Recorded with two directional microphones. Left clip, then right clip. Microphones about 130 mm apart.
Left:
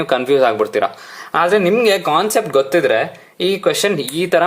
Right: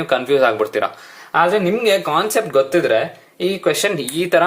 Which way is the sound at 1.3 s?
35° left (ahead or behind).